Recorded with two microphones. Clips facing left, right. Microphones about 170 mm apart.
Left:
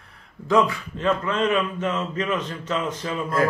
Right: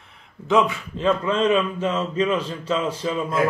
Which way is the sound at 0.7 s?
30° right (ahead or behind).